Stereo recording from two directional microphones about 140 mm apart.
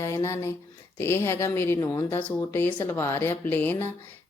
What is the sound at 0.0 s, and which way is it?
Speech, 20° left (ahead or behind).